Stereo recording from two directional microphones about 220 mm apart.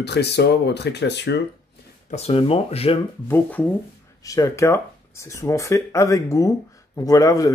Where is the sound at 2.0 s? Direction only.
30° left (ahead or behind).